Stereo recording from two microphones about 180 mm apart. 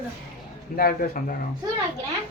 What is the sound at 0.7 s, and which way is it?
Speech, 50° left (ahead or behind).